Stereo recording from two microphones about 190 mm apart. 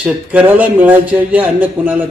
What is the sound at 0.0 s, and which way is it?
A man's voice, 5° right (ahead or behind).